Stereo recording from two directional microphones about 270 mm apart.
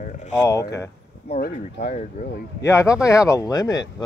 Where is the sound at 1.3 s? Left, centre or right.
Left.